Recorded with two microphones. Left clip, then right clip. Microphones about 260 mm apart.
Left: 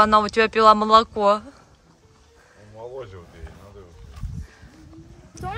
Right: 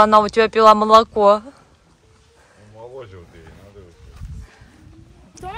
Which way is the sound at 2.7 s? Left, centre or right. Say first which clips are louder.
Left 1 dB; centre.